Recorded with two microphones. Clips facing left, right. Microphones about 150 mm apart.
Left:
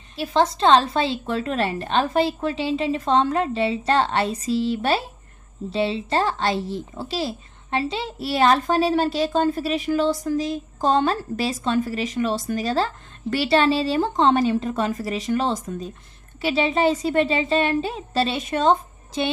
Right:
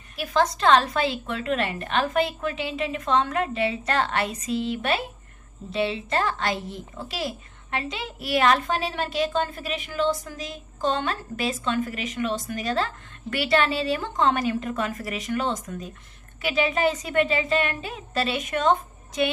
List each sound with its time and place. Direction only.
0.1 s a woman's voice: 25° left (ahead or behind)